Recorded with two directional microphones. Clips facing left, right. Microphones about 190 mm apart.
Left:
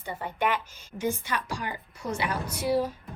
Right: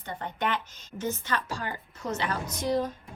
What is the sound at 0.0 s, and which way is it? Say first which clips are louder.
A woman's voice: left 2 dB; 10° left (ahead or behind).